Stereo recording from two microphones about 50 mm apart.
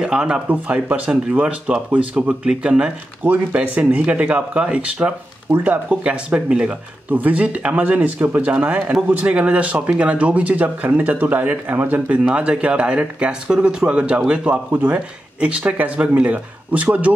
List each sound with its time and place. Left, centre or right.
0.0 s speech: centre
0.5 s speech: right
3.5 s speech: right
5.5 s speech: right
5.9 s speech: right
7.1 s speech: right
12.3 s speech: right